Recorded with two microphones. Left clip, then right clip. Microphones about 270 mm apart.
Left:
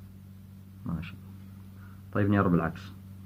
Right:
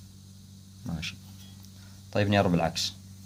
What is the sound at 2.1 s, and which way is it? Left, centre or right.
Speech, right.